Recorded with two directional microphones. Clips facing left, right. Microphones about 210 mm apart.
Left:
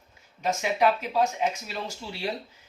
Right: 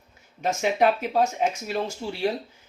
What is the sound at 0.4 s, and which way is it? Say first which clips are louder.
Speech: right 2 dB; 55° right (ahead or behind).